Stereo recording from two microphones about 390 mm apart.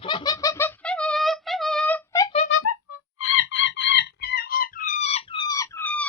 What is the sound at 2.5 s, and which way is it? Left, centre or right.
Music, left.